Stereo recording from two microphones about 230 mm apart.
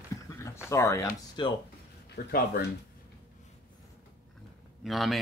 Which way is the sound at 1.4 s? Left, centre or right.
Centre.